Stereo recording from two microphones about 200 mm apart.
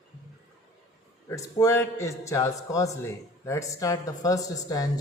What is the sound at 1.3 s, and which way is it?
A man's voice, 15° left (ahead or behind).